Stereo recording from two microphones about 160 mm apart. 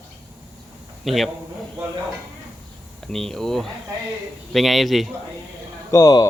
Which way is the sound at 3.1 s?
5° left (ahead or behind).